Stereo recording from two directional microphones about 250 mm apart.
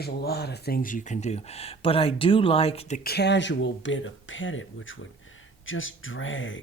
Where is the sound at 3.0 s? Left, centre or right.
Left.